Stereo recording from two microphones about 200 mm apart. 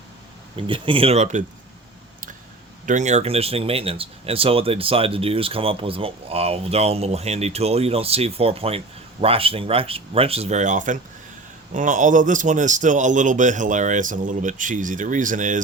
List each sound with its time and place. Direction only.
0.5 s speech: 25° right (ahead or behind)
2.8 s speech: 35° right (ahead or behind)